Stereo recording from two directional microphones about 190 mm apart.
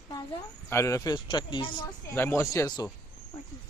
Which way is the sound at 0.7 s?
15° left (ahead or behind).